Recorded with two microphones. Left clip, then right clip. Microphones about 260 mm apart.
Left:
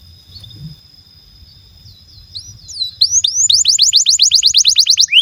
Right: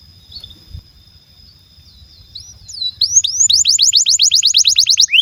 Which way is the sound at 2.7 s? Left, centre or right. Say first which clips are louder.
Left 1 dB; centre.